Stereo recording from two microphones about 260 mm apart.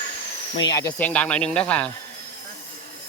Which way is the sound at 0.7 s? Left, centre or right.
Centre.